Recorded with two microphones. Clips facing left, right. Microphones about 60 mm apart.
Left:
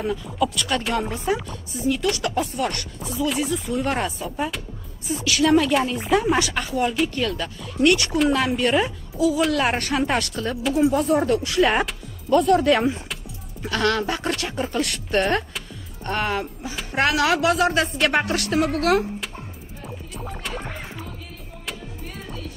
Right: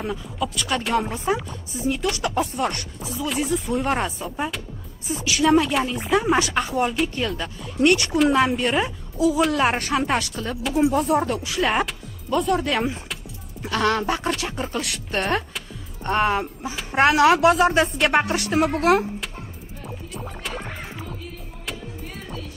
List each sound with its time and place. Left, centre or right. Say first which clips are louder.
0.0 s speech: left 4 dB; centre
1.1 s speech: even; centre
3.0 s speech: left 4 dB; centre
3.4 s speech: right 1 dB; right
3.8 s speech: right 1 dB; centre
5.0 s speech: left 1 dB; centre
5.3 s speech: even; centre
6.3 s speech: right 2 dB; centre
7.0 s speech: left 1 dB; centre
9.8 s speech: even; centre
16.0 s speech: right 4 dB; centre
17.1 s speech: right 5 dB; right
17.9 s speech: right 1 dB; centre
19.8 s music: right 1 dB; centre